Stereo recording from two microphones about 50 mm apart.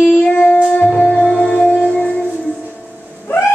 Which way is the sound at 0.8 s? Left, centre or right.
Centre.